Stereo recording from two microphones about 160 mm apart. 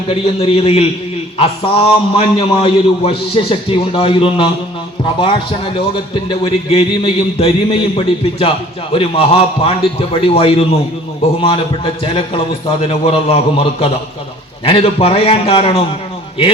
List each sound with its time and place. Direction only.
0.1 s speech: 40° left (ahead or behind)
6.2 s speech: 35° left (ahead or behind)
12.9 s speech: 35° left (ahead or behind)